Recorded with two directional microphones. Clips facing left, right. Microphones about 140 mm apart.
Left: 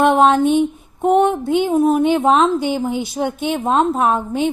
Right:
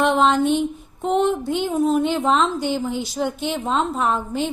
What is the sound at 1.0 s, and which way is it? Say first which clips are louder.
A woman's voice: left 5 dB; 55° left (ahead or behind).